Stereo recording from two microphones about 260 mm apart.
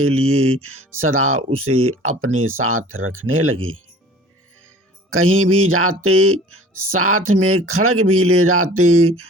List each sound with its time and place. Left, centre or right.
0.0 s speech: right
5.1 s speech: right